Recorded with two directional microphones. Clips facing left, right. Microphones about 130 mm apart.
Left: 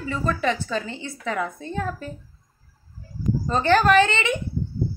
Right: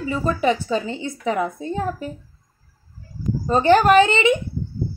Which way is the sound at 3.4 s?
15° right (ahead or behind).